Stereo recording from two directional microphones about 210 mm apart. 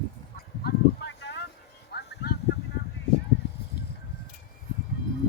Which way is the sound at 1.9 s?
50° left (ahead or behind).